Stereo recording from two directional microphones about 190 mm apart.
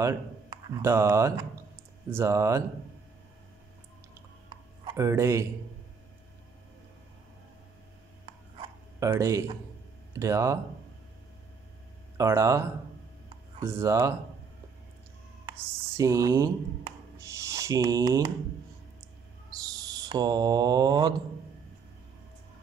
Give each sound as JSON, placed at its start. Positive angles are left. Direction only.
{"t": 0.0, "sound": "speech", "side_deg": -15}
{"t": 4.8, "sound": "speech", "side_deg": -15}
{"t": 9.0, "sound": "speech", "side_deg": -15}
{"t": 12.2, "sound": "speech", "side_deg": -15}
{"t": 13.7, "sound": "speech", "side_deg": -15}
{"t": 16.0, "sound": "speech", "side_deg": -15}
{"t": 20.0, "sound": "mantra", "side_deg": -20}